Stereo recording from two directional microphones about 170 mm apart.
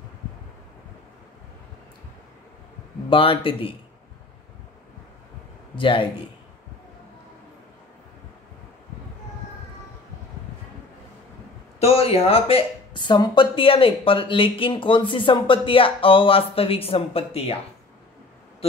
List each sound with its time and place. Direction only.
3.1 s speech: 30° left (ahead or behind)
5.8 s speech: 30° left (ahead or behind)
11.8 s speech: 35° left (ahead or behind)